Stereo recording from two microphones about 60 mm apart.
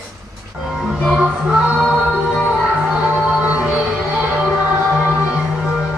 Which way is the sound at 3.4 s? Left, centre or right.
Right.